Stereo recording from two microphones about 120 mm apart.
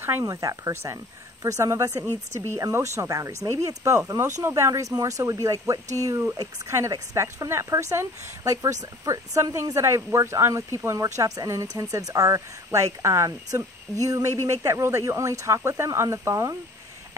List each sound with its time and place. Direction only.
0.0 s speech: 20° right (ahead or behind)